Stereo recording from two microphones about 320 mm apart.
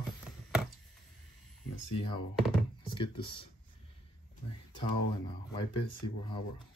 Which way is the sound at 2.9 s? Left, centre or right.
Centre.